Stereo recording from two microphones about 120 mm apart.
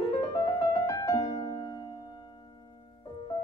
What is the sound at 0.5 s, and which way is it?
Music, 30° left (ahead or behind).